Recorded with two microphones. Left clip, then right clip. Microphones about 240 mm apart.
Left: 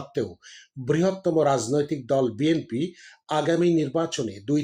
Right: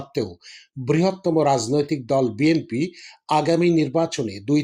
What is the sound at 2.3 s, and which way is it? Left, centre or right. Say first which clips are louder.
Speech: right 4 dB; centre.